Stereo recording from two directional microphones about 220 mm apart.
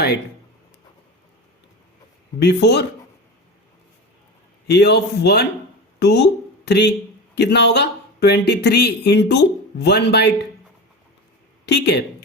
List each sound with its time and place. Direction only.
2.4 s speech: 50° left (ahead or behind)
4.7 s speech: 50° left (ahead or behind)
11.6 s speech: 50° left (ahead or behind)